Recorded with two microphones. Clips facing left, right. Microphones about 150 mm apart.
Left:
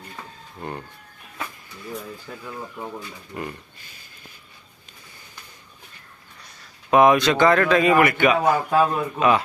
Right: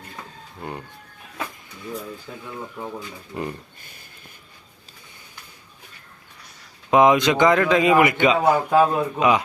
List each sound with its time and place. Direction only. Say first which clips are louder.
3.3 s speech: right 3 dB; 15° right (ahead or behind)
6.9 s speech: even; 20° right (ahead or behind)